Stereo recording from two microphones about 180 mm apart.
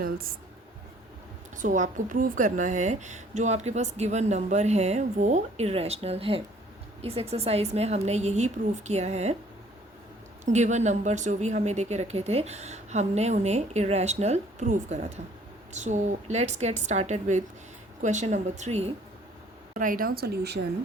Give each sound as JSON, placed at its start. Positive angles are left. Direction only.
{"t": 1.5, "sound": "a woman's voice", "side_deg": -45}
{"t": 10.4, "sound": "a woman's voice", "side_deg": -40}
{"t": 19.8, "sound": "speech", "side_deg": -50}